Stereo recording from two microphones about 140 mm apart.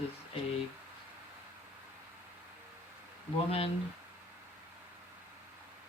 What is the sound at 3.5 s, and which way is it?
Speech, 45° left (ahead or behind).